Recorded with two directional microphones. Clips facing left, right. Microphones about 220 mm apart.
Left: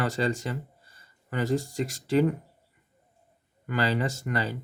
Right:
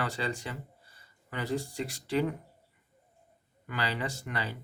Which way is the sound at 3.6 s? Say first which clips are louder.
Left 7 dB; 45° left (ahead or behind).